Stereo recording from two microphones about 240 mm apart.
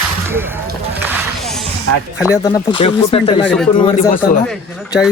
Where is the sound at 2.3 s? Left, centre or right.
Centre.